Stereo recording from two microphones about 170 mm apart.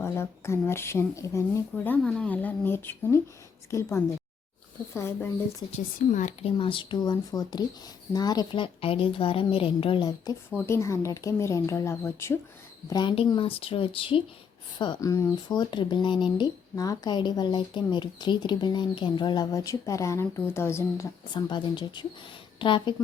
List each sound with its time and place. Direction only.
0.0 s speech: 15° left (ahead or behind)
4.9 s speech: 15° left (ahead or behind)
5.7 s a woman's voice: 45° left (ahead or behind)
6.6 s a woman's voice: 30° left (ahead or behind)
12.9 s a woman's voice: 25° left (ahead or behind)